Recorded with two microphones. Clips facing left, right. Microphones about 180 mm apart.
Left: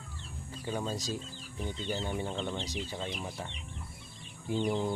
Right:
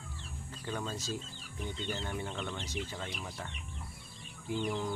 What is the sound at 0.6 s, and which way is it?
Speech, 15° left (ahead or behind).